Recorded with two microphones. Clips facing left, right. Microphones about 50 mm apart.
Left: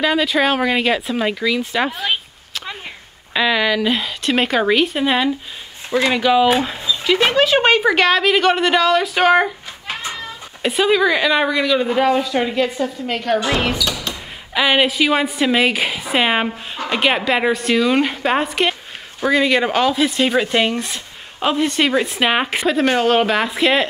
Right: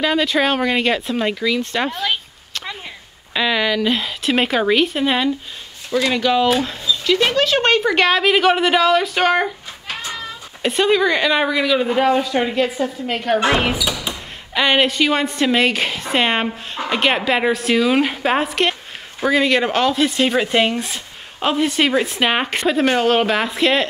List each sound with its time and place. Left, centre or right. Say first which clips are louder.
0.0 s a woman's voice: left 1 dB; centre
3.3 s a woman's voice: left 1 dB; centre
5.9 s speech: left 1 dB; left
6.1 s speech: left 2 dB; centre
10.6 s a woman's voice: left 1 dB; centre
14.5 s a woman's voice: even; centre